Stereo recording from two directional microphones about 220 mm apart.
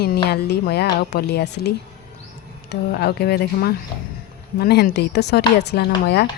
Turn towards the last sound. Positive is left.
turn(degrees=45)  # may be behind; listen again after turning